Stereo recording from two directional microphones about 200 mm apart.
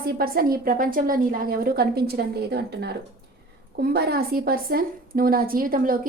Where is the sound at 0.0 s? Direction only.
50° right (ahead or behind).